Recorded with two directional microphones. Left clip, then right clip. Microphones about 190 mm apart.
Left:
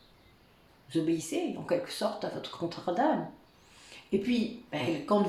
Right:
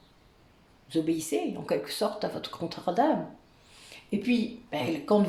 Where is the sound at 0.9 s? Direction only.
45° right (ahead or behind).